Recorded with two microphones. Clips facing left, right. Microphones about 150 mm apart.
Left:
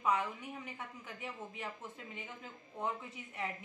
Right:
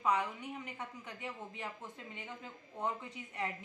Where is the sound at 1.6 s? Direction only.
Centre (ahead or behind).